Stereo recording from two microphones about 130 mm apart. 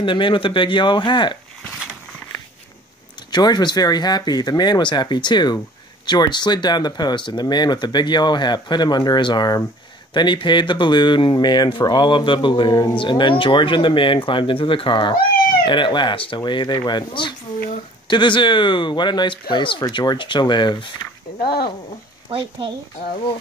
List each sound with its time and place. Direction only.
0.0 s speech: 40° left (ahead or behind)
3.3 s speech: 35° left (ahead or behind)
22.3 s speech: 40° right (ahead or behind)